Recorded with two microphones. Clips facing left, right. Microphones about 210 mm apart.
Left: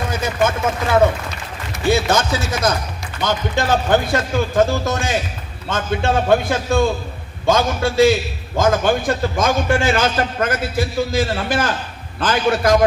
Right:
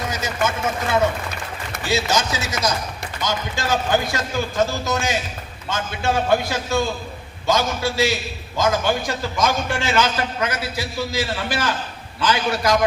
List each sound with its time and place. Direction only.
1.9 s a man's voice: 55° left (ahead or behind)